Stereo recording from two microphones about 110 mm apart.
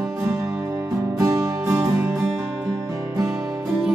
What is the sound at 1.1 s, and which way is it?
Music, 25° right (ahead or behind).